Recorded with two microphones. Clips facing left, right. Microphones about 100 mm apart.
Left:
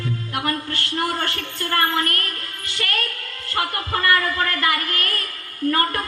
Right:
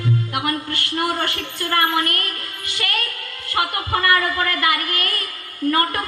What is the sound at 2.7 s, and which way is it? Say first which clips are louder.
Music: right 1 dB; 15° right (ahead or behind).